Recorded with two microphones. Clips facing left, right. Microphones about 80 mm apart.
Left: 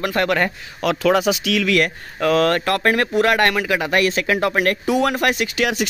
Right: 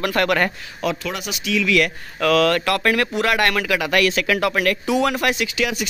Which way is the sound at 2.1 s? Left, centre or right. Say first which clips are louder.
Even; left.